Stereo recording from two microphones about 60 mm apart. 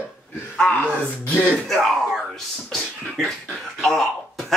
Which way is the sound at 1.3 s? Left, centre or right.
Left.